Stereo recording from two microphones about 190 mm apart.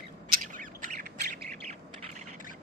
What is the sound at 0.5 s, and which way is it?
Squawk, 45° right (ahead or behind).